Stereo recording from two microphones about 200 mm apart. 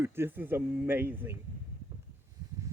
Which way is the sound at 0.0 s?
10° right (ahead or behind).